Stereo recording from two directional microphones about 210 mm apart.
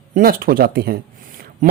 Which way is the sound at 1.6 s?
40° right (ahead or behind).